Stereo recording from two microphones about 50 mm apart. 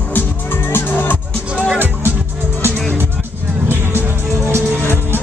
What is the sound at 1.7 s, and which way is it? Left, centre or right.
Music, right.